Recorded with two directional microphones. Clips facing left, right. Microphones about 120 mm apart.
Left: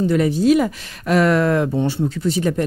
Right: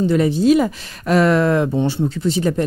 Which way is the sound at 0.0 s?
25° right (ahead or behind).